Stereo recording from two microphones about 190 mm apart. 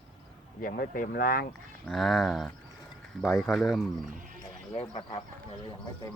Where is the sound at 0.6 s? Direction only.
50° left (ahead or behind).